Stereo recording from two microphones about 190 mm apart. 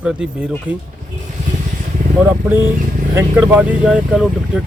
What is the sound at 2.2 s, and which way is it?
Speech, 10° right (ahead or behind).